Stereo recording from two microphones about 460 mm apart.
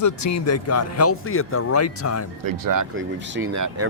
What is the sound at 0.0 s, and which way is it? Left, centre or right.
Speech, left.